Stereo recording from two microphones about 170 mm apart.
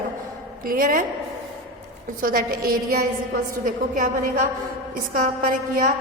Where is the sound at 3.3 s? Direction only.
55° right (ahead or behind).